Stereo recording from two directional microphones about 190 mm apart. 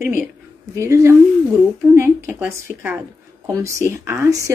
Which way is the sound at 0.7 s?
15° right (ahead or behind).